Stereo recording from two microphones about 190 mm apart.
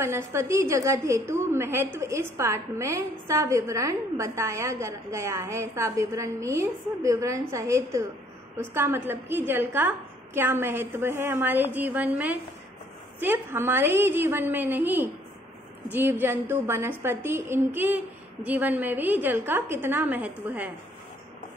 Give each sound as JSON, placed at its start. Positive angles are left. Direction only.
{"t": 0.0, "sound": "a woman's voice", "side_deg": -15}